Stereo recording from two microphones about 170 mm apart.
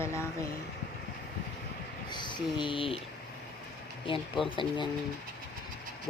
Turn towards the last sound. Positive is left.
turn(degrees=30)  # may be behind; listen again after turning